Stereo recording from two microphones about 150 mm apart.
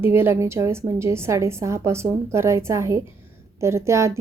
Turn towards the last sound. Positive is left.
turn(degrees=-20)  # may be behind; listen again after turning